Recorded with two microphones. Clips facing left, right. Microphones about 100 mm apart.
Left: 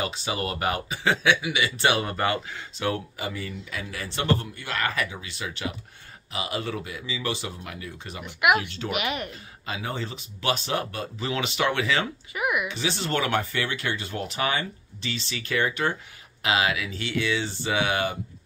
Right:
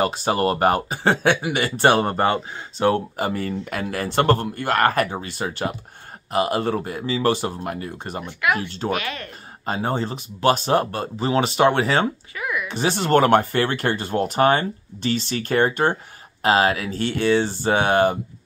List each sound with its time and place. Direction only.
0.0 s speech: 50° right (ahead or behind)
2.1 s speech: 30° right (ahead or behind)
3.3 s speech: 55° right (ahead or behind)
8.4 s speech: 20° left (ahead or behind)
8.6 s speech: 35° right (ahead or behind)
8.9 s speech: 20° left (ahead or behind)
9.7 s speech: 40° right (ahead or behind)
12.4 s a woman's voice: 20° left (ahead or behind)
12.6 s speech: 50° right (ahead or behind)